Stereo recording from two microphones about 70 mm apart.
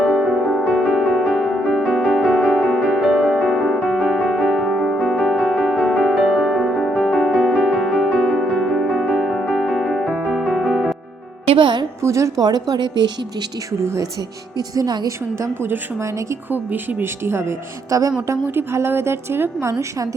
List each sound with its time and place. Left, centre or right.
0.0 s music: centre
12.0 s speech: right
12.4 s a woman's voice: right
13.8 s speech: right
14.8 s a woman's voice: right
16.5 s speech: right
17.9 s speech: right
18.4 s speech: right